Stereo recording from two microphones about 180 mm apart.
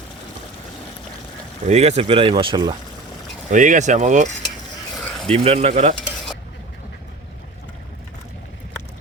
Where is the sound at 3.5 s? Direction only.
45° right (ahead or behind).